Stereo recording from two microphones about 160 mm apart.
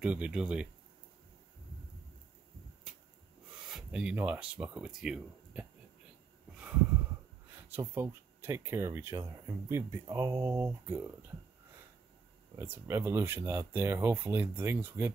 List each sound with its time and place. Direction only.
0.0 s speech: 5° right (ahead or behind)
3.6 s speech: 5° right (ahead or behind)
7.7 s speech: 15° right (ahead or behind)
12.5 s speech: 15° right (ahead or behind)